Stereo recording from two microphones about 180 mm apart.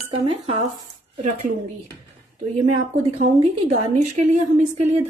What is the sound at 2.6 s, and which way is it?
A woman's voice, 45° right (ahead or behind).